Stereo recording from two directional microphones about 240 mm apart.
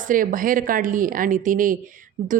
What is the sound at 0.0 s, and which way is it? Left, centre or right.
A woman's voice, right.